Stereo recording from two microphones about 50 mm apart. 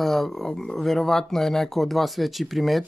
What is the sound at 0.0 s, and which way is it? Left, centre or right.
Speech, centre.